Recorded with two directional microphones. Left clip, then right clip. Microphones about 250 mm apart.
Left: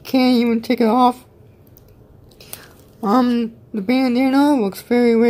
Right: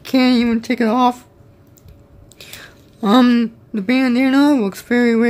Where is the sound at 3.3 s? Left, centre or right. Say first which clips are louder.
Right 4 dB; centre.